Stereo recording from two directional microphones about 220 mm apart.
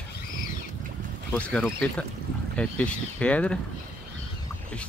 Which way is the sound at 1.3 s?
5° left (ahead or behind).